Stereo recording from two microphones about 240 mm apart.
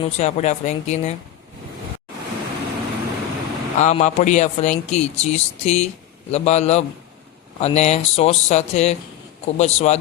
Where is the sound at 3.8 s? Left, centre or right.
Left.